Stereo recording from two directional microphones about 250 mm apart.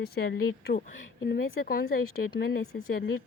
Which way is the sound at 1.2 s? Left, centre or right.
Left.